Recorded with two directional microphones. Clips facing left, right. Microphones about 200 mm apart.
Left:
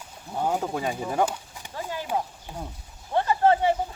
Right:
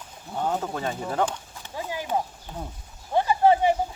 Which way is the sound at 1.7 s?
15° right (ahead or behind).